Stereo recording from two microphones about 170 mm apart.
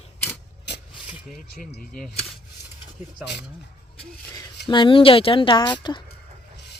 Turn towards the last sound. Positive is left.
turn(degrees=25)  # may be behind; listen again after turning